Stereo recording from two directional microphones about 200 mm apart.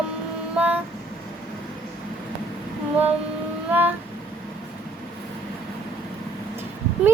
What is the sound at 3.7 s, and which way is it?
Music, 10° right (ahead or behind).